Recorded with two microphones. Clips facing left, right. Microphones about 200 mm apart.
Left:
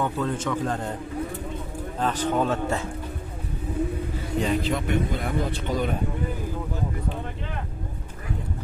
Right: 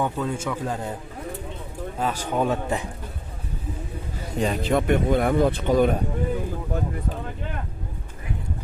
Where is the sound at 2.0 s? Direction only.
10° right (ahead or behind).